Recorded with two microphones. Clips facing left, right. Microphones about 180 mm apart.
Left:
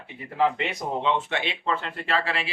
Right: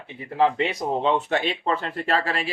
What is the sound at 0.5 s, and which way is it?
Speech, 40° right (ahead or behind).